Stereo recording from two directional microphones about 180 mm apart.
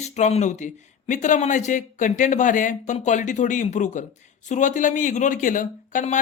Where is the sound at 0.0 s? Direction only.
40° left (ahead or behind).